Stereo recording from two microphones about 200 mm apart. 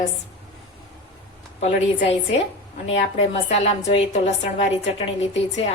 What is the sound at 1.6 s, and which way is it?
A woman's voice, 35° left (ahead or behind).